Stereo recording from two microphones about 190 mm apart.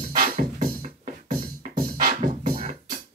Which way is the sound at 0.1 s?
50° right (ahead or behind).